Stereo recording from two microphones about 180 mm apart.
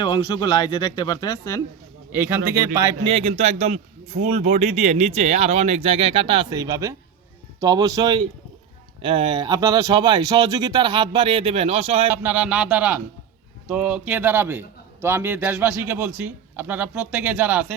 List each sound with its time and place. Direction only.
0.0 s speech: 30° left (ahead or behind)
2.1 s a man's voice: 10° right (ahead or behind)
3.0 s a man's voice: 30° right (ahead or behind)
12.1 s a man's voice: 10° right (ahead or behind)